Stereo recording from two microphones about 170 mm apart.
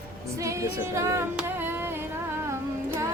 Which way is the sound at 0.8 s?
15° right (ahead or behind).